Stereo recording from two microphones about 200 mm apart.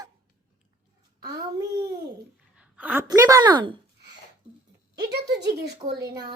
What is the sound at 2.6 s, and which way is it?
A woman's voice, 5° right (ahead or behind).